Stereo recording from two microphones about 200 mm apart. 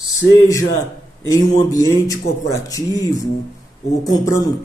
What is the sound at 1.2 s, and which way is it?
Speech, 15° left (ahead or behind).